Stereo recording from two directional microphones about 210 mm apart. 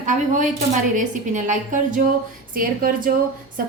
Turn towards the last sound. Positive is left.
turn(degrees=-40)  # may be behind; listen again after turning